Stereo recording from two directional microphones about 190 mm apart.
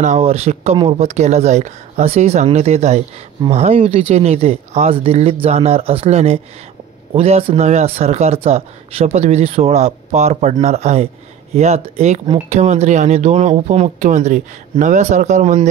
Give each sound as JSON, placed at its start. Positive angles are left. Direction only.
{"t": 0.0, "sound": "speech", "side_deg": -35}